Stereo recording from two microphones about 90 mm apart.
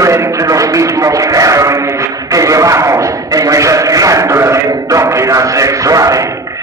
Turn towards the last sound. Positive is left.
turn(degrees=-40)  # may be behind; listen again after turning